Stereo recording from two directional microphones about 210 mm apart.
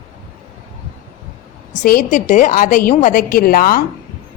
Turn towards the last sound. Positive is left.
turn(degrees=45)  # may be behind; listen again after turning